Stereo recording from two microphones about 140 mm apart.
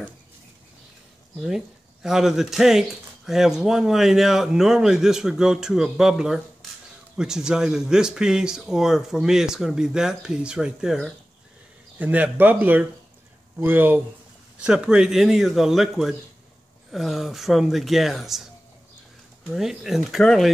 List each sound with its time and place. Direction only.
2.0 s speech: 5° right (ahead or behind)
19.5 s speech: 5° right (ahead or behind)